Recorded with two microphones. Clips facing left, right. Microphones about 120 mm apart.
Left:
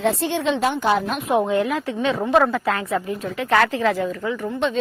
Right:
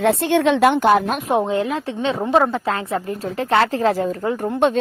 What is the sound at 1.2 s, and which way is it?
A woman's voice, 25° right (ahead or behind).